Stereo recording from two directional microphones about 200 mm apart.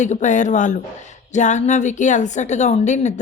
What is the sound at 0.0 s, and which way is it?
Speech, 35° left (ahead or behind).